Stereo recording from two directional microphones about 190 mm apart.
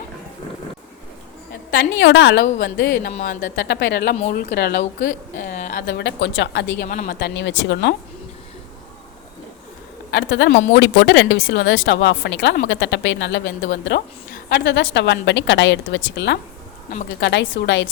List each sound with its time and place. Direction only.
1.7 s speech: 70° left (ahead or behind)
3.1 s a woman's voice: 40° left (ahead or behind)
3.6 s speech: 65° left (ahead or behind)
4.1 s a woman's voice: 40° left (ahead or behind); by 4.8 s 60° left (ahead or behind)
5.4 s a woman's voice: 45° left (ahead or behind)
5.8 s speech: 65° left (ahead or behind)
6.8 s a woman's voice: 45° left (ahead or behind)
7.2 s speech: 65° left (ahead or behind)
10.1 s speech: 75° left (ahead or behind)